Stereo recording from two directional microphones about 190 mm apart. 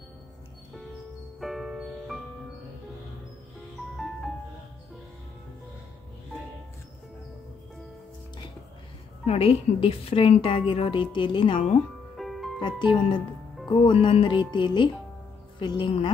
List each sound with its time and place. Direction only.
1.4 s music: centre (ahead or behind)
9.2 s a woman's voice: 30° left (ahead or behind)
12.2 s music: centre (ahead or behind)
12.5 s a woman's voice: 25° left (ahead or behind)